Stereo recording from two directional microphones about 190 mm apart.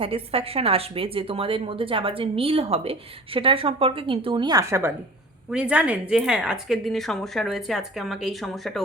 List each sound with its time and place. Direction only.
0.0 s a woman's voice: 30° right (ahead or behind)
5.5 s a woman's voice: 5° right (ahead or behind)